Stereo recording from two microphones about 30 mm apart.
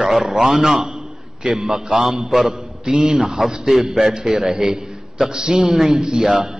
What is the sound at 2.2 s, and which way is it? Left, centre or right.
Speech, centre.